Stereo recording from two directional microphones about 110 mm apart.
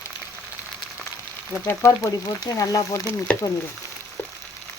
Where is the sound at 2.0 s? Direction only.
35° left (ahead or behind).